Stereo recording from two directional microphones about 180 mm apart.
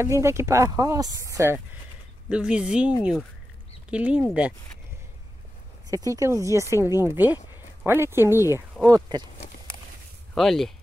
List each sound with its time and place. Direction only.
0.0 s speech: 15° right (ahead or behind)
2.2 s speech: 5° right (ahead or behind)
5.9 s speech: 20° right (ahead or behind)
7.5 s a sound: 15° right (ahead or behind)
8.8 s speech: 20° right (ahead or behind)
10.3 s speech: centre (ahead or behind)